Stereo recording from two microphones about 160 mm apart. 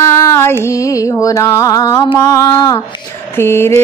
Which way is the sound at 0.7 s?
20° left (ahead or behind).